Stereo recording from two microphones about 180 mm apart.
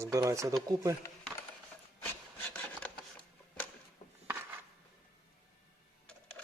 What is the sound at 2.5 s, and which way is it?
Filing, 10° left (ahead or behind).